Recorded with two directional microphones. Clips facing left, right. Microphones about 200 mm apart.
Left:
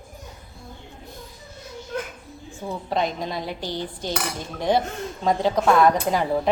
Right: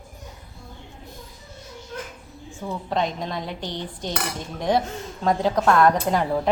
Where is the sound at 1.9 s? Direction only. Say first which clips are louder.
Left 5 dB; 65° left (ahead or behind).